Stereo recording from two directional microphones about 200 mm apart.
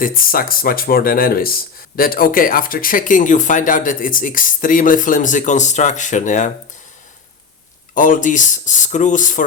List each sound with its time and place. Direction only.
0.0 s speech: 45° left (ahead or behind)
7.9 s speech: 40° left (ahead or behind)